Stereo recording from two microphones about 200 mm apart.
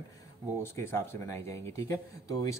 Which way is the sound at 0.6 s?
10° left (ahead or behind).